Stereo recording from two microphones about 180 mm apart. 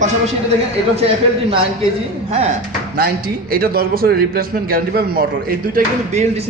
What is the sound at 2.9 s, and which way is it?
A man's voice, 55° right (ahead or behind).